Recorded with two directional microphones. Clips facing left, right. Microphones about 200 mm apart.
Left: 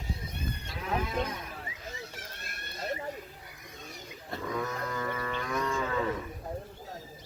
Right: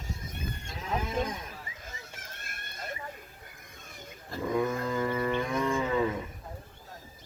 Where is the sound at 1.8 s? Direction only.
50° right (ahead or behind).